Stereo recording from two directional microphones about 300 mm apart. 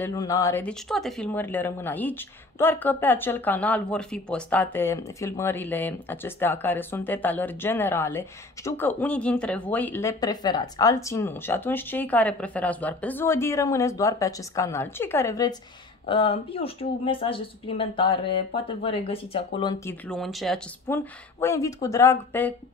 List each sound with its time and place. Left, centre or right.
0.0 s speech: centre
20.1 s speech: centre